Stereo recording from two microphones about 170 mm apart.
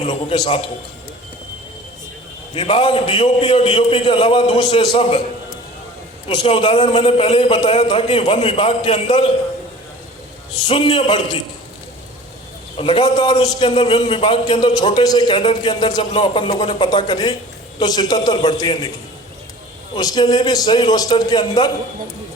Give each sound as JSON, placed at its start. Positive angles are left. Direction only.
{"t": 0.0, "sound": "a man's voice", "side_deg": 30}
{"t": 2.6, "sound": "a man's voice", "side_deg": 30}
{"t": 6.2, "sound": "a man's voice", "side_deg": 35}
{"t": 10.7, "sound": "a man's voice", "side_deg": 30}
{"t": 12.7, "sound": "a man's voice", "side_deg": 30}
{"t": 20.0, "sound": "a man's voice", "side_deg": 25}